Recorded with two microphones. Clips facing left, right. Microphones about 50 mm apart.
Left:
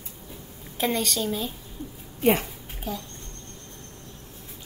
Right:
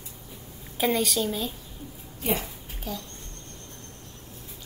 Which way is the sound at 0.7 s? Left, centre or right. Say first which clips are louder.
Right 1 dB; centre.